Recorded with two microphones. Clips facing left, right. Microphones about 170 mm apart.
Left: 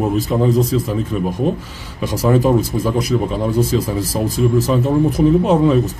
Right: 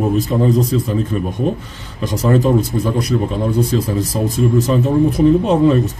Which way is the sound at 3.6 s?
5° left (ahead or behind).